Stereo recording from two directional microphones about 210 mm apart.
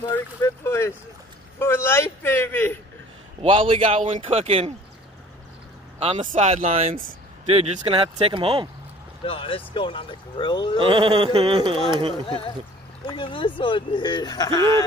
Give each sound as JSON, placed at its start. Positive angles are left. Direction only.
{"t": 0.1, "sound": "speech", "side_deg": 10}
{"t": 3.4, "sound": "speech", "side_deg": -25}
{"t": 5.9, "sound": "speech", "side_deg": -30}
{"t": 9.2, "sound": "speech", "side_deg": 25}
{"t": 10.8, "sound": "speech", "side_deg": -25}
{"t": 13.0, "sound": "speech", "side_deg": 25}